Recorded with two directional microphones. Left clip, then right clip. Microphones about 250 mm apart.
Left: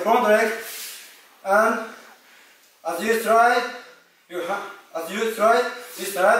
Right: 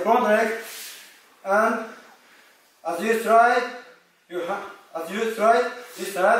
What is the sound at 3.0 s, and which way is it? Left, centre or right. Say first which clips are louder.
A man's voice: even; centre.